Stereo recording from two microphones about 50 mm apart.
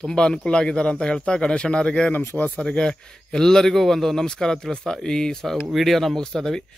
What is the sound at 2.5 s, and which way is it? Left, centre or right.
Speech, centre.